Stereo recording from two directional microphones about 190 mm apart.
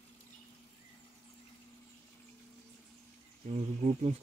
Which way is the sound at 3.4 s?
35° right (ahead or behind).